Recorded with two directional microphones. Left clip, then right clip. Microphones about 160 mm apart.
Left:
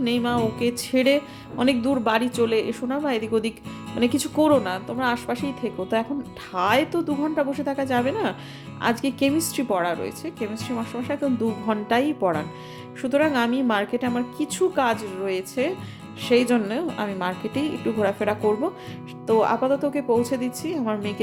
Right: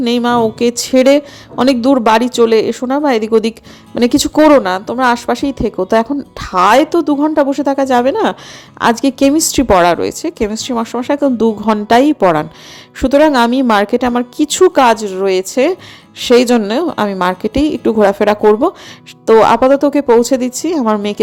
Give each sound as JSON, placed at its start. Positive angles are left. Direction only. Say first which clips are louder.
{"t": 0.0, "sound": "a woman's voice", "louder": "right 11 dB", "side_deg": -50}